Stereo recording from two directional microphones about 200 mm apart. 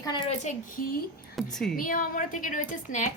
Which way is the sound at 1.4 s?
Centre (ahead or behind).